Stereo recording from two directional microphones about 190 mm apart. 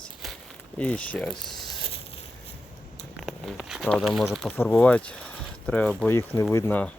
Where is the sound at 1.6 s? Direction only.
30° left (ahead or behind).